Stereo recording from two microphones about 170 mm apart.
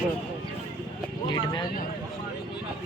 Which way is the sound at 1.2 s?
25° left (ahead or behind).